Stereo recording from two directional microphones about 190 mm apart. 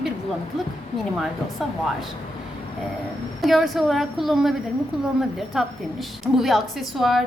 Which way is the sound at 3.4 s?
Centre (ahead or behind).